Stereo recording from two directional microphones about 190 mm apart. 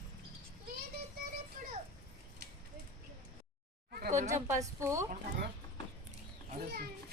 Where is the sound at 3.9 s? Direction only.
50° right (ahead or behind).